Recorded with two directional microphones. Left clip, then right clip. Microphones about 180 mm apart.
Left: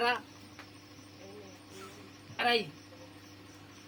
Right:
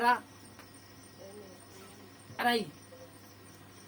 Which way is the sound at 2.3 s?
20° right (ahead or behind).